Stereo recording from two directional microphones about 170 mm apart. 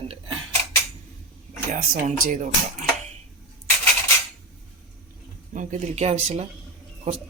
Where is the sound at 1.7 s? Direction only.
50° right (ahead or behind).